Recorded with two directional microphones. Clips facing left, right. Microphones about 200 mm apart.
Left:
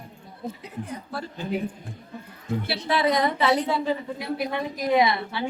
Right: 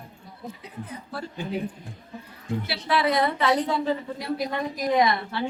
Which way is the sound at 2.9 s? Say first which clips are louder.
Left 1 dB; 20° left (ahead or behind).